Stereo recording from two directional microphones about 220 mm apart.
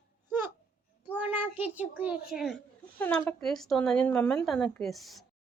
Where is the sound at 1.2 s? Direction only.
10° right (ahead or behind).